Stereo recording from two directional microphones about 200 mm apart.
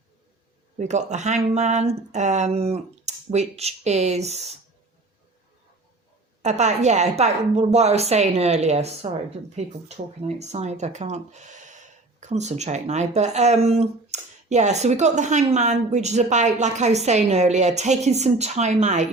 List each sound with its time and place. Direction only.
0.8 s speech: 35° right (ahead or behind)
6.4 s speech: 35° right (ahead or behind)
10.2 s speech: 35° right (ahead or behind)